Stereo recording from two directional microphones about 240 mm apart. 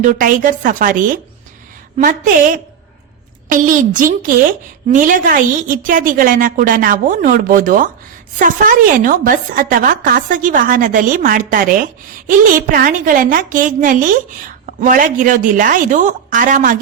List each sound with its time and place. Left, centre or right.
0.0 s a woman's voice: right